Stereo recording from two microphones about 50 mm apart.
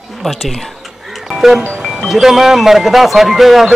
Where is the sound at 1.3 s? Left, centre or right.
Centre.